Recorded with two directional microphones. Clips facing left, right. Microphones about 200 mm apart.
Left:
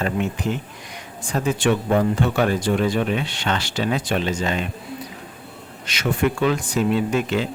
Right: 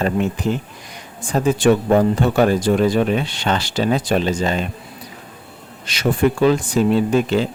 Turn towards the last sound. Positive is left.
turn(degrees=-35)  # may be behind; listen again after turning